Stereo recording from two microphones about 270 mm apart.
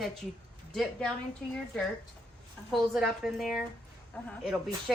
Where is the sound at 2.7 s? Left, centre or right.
Centre.